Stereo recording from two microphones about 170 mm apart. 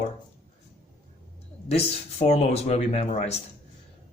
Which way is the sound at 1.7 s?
35° left (ahead or behind).